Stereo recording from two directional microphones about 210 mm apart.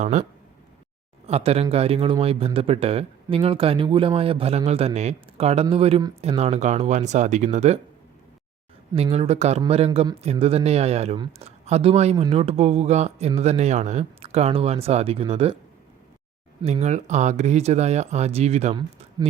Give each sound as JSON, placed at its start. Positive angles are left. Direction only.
{"t": 0.0, "sound": "speech", "side_deg": -35}
{"t": 1.3, "sound": "speech", "side_deg": -30}
{"t": 8.9, "sound": "speech", "side_deg": -25}
{"t": 16.6, "sound": "speech", "side_deg": -30}